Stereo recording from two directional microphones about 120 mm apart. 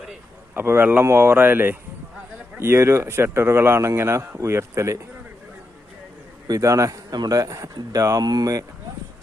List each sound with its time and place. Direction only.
0.5 s speech: 15° right (ahead or behind)
6.5 s speech: 25° right (ahead or behind)